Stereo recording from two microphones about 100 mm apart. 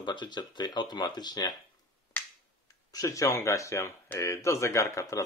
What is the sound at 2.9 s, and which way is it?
Speech, 35° left (ahead or behind).